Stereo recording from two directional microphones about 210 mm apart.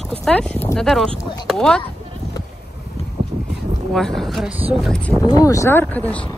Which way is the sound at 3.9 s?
Centre (ahead or behind).